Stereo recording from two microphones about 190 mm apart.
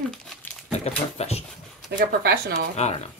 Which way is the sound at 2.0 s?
60° right (ahead or behind).